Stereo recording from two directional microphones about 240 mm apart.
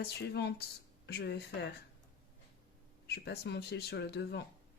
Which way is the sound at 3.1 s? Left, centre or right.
Left.